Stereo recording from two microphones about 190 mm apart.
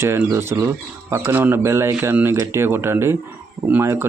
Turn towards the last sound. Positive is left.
turn(degrees=-15)  # may be behind; listen again after turning